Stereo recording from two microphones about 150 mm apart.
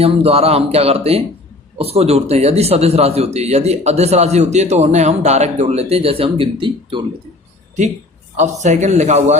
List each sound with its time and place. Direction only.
0.0 s a man's voice: 40° right (ahead or behind)
8.4 s a man's voice: 50° right (ahead or behind)